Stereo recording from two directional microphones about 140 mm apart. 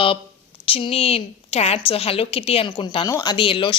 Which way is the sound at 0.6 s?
40° left (ahead or behind).